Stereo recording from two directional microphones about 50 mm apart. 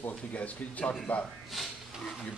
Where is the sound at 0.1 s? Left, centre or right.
Left.